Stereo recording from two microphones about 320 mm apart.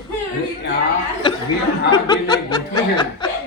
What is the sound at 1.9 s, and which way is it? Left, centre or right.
Speech, centre.